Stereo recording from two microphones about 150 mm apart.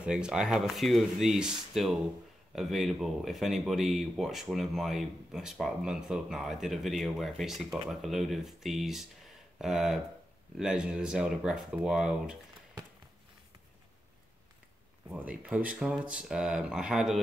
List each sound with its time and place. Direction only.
0.0 s speech: 5° right (ahead or behind)
15.0 s speech: 10° right (ahead or behind)